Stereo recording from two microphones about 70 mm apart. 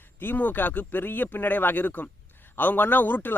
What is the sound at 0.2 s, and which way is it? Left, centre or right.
A man's voice, left.